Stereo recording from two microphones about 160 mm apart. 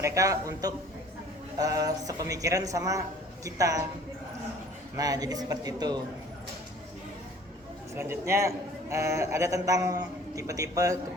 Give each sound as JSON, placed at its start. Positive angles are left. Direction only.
{"t": 0.0, "sound": "a man's voice", "side_deg": -20}
{"t": 4.9, "sound": "a man's voice", "side_deg": -25}
{"t": 7.9, "sound": "a man's voice", "side_deg": -15}